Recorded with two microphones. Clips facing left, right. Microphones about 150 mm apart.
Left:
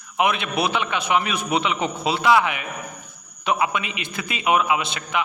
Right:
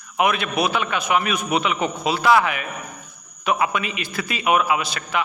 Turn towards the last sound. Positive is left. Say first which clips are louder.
# even
turn(degrees=20)  # may be behind; listen again after turning